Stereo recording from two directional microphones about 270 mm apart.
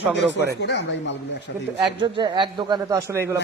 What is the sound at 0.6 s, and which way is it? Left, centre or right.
Speech, left.